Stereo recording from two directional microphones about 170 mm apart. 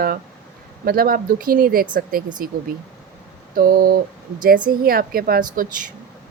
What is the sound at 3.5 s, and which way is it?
A woman's voice, 55° right (ahead or behind).